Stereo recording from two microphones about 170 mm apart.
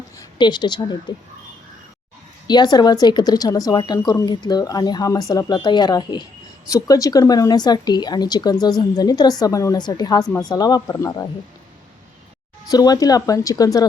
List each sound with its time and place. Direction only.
0.2 s a woman's voice: 25° left (ahead or behind)
2.5 s a woman's voice: 25° left (ahead or behind)
12.6 s a woman's voice: 20° left (ahead or behind)